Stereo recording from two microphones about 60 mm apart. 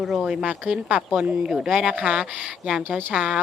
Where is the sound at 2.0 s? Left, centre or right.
Centre.